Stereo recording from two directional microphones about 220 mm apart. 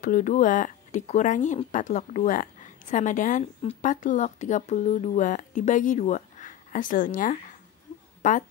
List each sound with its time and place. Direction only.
0.0 s a woman's voice: 35° left (ahead or behind)